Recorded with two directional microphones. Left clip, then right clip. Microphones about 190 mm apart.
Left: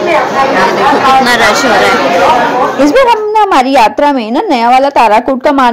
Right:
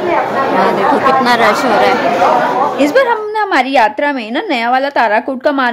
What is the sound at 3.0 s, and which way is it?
A woman's voice, 5° left (ahead or behind).